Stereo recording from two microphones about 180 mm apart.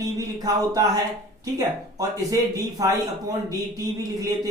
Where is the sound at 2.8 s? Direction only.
20° right (ahead or behind).